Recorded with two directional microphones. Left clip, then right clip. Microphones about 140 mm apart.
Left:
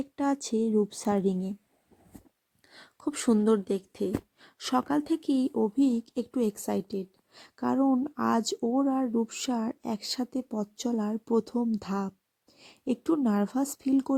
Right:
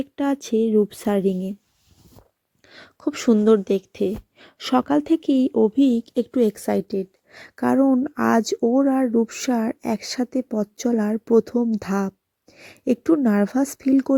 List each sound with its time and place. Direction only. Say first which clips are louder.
0.0 s speech: right 5 dB; 10° right (ahead or behind)
2.6 s speech: right 8 dB; 25° right (ahead or behind)